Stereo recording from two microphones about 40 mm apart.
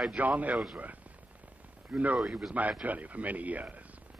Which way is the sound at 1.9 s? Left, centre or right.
Right.